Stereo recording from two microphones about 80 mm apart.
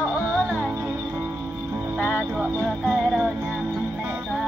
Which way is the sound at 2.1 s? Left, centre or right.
Centre.